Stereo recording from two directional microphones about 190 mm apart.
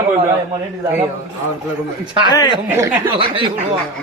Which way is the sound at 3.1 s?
25° right (ahead or behind).